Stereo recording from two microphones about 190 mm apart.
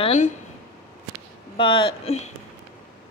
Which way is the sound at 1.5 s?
25° left (ahead or behind).